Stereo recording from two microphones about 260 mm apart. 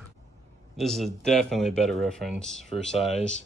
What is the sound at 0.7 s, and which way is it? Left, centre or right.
Speech, centre.